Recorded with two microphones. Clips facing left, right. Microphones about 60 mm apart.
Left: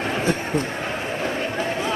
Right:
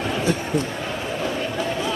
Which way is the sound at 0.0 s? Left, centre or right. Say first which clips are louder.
Even; left.